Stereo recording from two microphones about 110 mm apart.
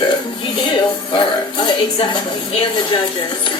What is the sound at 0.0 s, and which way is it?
Music, 50° left (ahead or behind).